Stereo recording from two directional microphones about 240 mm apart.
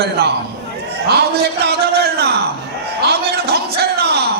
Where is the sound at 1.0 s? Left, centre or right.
Right.